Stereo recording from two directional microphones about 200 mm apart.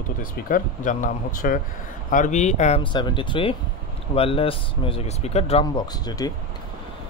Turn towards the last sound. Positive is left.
turn(degrees=20)  # may be behind; listen again after turning